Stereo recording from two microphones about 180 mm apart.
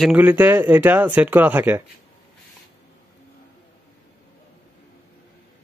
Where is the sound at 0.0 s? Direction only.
10° right (ahead or behind).